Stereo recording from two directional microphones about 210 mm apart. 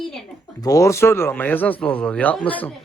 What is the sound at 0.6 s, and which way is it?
A man's voice, 15° left (ahead or behind).